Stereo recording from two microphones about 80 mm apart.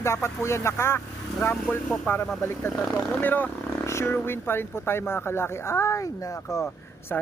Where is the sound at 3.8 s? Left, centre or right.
Left.